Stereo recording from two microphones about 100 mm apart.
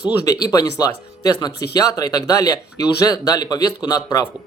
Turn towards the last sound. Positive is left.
turn(degrees=40)  # may be behind; listen again after turning